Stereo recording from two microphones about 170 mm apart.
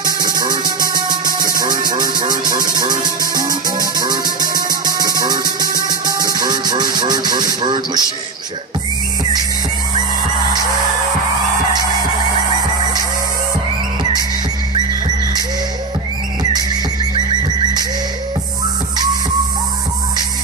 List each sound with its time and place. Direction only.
0.0 s music: 25° right (ahead or behind)
1.2 s music: 55° right (ahead or behind)
1.6 s music: 25° right (ahead or behind)